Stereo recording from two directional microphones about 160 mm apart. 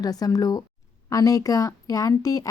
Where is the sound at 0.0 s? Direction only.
25° left (ahead or behind).